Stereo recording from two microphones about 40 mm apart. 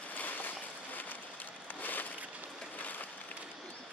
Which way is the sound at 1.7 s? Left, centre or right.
Left.